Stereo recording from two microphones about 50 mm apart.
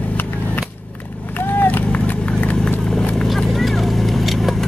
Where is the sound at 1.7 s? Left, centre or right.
Left.